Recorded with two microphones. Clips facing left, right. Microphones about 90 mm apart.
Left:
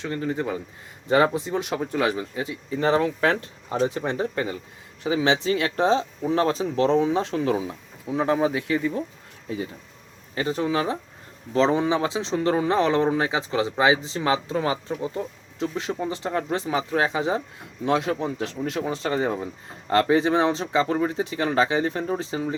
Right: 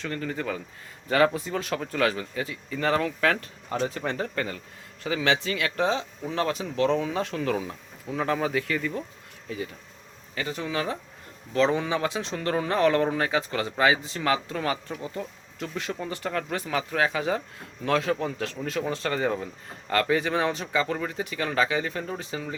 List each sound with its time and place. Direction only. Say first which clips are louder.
0.0 s speech: left 4 dB; 20° left (ahead or behind)